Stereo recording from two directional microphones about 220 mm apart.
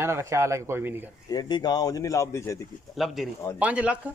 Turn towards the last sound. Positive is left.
turn(degrees=-5)  # may be behind; listen again after turning